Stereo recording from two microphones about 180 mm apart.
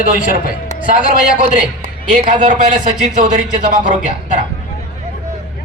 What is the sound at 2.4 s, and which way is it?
A man's voice, 40° right (ahead or behind).